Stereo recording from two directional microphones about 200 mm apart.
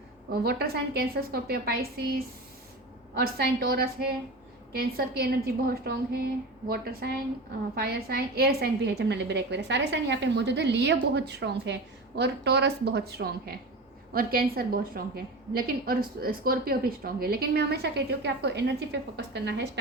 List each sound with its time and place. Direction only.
0.4 s a woman's voice: 50° right (ahead or behind)